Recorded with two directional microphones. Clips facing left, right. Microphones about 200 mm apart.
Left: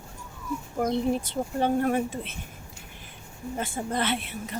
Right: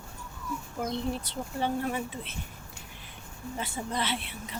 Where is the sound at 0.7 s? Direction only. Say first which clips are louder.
Left 7 dB; 50° left (ahead or behind).